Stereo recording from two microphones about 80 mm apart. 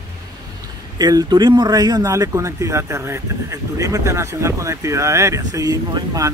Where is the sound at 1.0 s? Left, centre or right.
Right.